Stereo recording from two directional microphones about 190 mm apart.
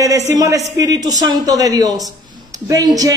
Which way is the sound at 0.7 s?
20° right (ahead or behind).